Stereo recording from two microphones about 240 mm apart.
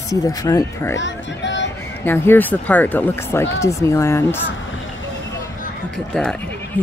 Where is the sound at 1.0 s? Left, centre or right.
Left.